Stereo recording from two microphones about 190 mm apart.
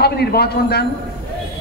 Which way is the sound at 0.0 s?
55° left (ahead or behind).